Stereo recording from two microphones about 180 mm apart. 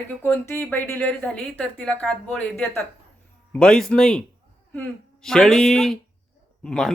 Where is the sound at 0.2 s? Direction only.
15° left (ahead or behind).